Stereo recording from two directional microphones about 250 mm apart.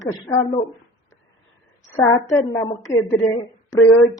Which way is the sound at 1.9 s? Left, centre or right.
Centre.